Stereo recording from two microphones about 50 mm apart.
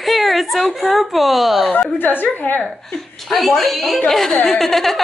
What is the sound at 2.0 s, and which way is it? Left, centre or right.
Speech, left.